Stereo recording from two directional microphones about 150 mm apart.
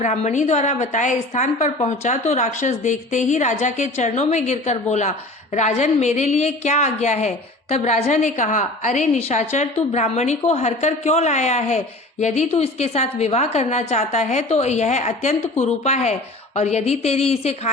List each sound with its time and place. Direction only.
0.0 s a woman's voice: 50° left (ahead or behind)